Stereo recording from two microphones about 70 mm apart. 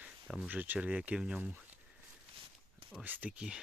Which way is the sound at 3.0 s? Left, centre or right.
Right.